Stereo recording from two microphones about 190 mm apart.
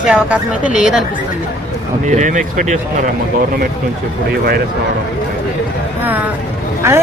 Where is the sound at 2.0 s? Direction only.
40° right (ahead or behind).